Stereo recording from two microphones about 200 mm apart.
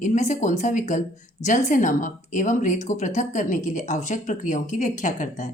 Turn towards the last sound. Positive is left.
turn(degrees=40)  # may be behind; listen again after turning